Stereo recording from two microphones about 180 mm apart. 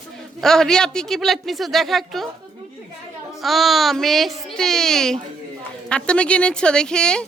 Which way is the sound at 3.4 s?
Centre (ahead or behind).